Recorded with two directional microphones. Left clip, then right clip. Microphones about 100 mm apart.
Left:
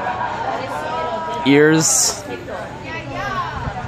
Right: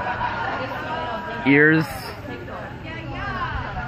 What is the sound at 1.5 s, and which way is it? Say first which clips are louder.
Speech: left 3 dB; 35° left (ahead or behind).